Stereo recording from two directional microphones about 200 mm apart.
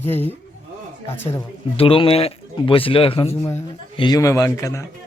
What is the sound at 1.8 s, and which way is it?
Speech, 25° left (ahead or behind).